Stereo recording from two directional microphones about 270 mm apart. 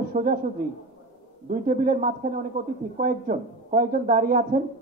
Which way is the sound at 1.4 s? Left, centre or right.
Right.